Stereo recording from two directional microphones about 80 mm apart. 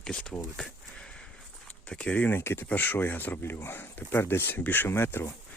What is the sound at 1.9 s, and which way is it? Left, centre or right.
Speech, centre.